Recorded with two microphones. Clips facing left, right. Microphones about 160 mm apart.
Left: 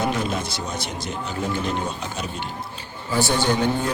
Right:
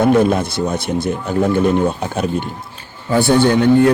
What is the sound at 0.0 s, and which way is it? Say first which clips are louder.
A man's voice: right 11 dB; 55° right (ahead or behind).